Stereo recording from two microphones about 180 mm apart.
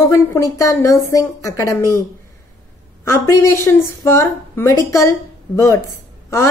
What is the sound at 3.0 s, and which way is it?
A woman's voice, 15° left (ahead or behind).